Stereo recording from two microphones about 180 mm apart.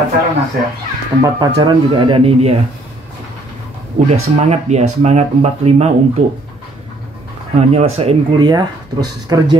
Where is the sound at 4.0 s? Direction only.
35° right (ahead or behind).